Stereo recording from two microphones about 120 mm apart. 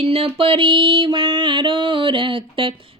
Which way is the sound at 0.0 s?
50° right (ahead or behind).